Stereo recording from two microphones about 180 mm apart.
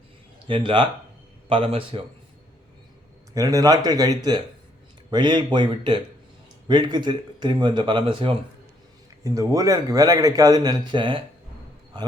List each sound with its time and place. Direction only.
0.4 s a man's voice: 25° right (ahead or behind)
3.3 s a man's voice: 20° right (ahead or behind)
9.2 s a man's voice: 20° right (ahead or behind)